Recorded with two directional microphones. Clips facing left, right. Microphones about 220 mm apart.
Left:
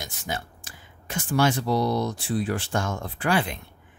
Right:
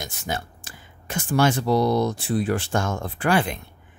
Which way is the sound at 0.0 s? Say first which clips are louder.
Right 3 dB; 50° right (ahead or behind).